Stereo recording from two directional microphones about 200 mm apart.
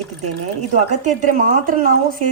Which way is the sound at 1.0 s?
45° right (ahead or behind).